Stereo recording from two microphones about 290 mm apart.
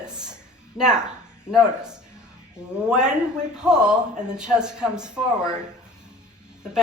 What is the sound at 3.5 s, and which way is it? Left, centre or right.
Speech, centre.